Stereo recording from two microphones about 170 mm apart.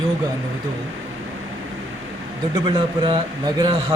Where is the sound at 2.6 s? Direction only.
30° right (ahead or behind).